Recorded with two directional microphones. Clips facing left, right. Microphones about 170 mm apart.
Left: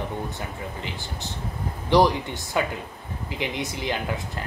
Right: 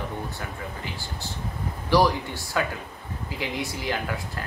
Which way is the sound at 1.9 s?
20° left (ahead or behind).